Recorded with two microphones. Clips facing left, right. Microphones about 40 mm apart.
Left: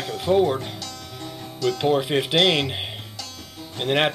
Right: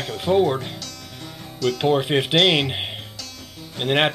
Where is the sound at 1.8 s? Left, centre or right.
Centre.